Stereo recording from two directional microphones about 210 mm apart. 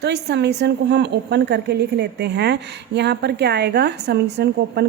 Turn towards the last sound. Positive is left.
turn(degrees=-50)  # may be behind; listen again after turning